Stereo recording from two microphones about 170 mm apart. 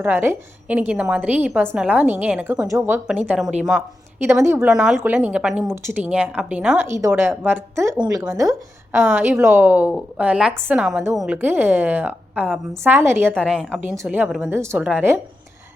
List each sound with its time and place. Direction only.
0.0 s a woman's voice: 10° right (ahead or behind)
4.7 s a woman's voice: 5° right (ahead or behind); by 9.0 s 20° right (ahead or behind)
9.0 s a woman's voice: 10° right (ahead or behind)